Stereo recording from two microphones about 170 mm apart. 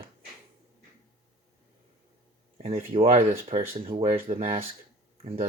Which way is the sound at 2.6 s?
35° right (ahead or behind).